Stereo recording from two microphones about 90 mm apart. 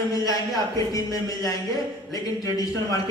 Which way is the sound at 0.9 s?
40° left (ahead or behind).